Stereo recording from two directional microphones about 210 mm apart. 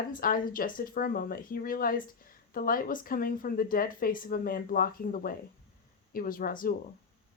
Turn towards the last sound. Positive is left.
turn(degrees=40)  # may be behind; listen again after turning